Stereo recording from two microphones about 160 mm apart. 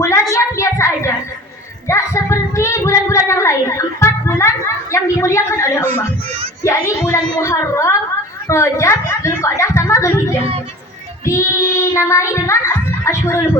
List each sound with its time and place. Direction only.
0.0 s a sound: 20° left (ahead or behind)
6.7 s a woman's voice: 20° left (ahead or behind)
11.3 s child singing: 20° left (ahead or behind)